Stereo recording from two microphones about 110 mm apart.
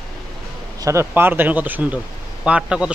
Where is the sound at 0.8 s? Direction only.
20° right (ahead or behind).